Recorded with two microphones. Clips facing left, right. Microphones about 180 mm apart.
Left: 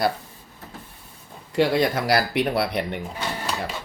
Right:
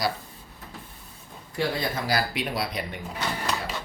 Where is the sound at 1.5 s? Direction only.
75° left (ahead or behind).